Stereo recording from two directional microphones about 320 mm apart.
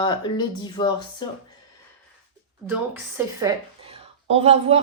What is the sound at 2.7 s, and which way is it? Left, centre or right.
A woman's voice, centre.